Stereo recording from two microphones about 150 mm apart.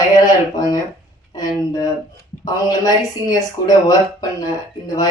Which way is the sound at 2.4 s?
25° left (ahead or behind).